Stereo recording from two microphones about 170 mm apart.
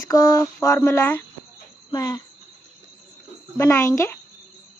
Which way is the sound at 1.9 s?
20° left (ahead or behind).